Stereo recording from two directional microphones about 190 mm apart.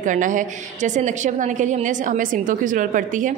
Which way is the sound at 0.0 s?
45° right (ahead or behind).